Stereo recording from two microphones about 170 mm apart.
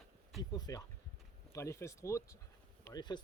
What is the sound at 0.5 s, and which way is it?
Speech, 20° left (ahead or behind).